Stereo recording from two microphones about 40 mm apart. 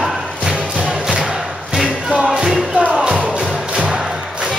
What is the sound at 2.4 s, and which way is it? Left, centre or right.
Music, centre.